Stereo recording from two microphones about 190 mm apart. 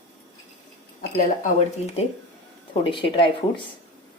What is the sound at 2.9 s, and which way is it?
Speech, 25° left (ahead or behind).